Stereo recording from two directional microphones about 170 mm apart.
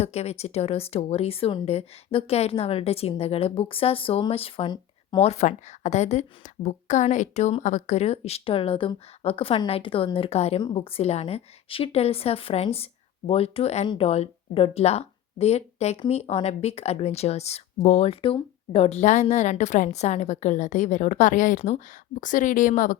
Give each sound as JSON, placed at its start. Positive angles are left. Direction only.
{"t": 0.0, "sound": "a woman's voice", "side_deg": 40}
{"t": 5.2, "sound": "a woman's voice", "side_deg": 40}